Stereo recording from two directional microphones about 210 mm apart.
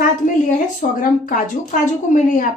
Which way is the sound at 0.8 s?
40° left (ahead or behind).